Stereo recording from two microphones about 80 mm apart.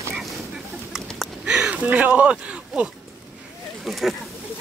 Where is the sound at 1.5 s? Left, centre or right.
Centre.